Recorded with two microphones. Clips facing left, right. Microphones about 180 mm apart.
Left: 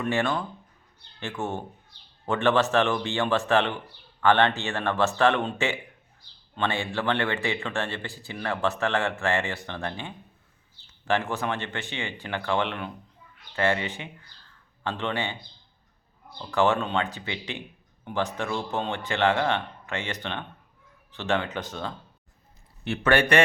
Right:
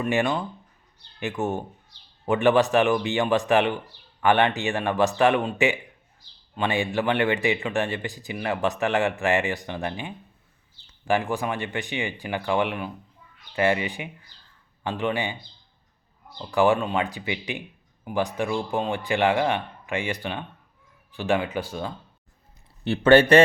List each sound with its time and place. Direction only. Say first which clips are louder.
0.1 s a man's voice: right 2 dB; 15° right (ahead or behind)
16.5 s a man's voice: right 3 dB; 15° right (ahead or behind)
22.8 s speech: right 7 dB; 30° right (ahead or behind)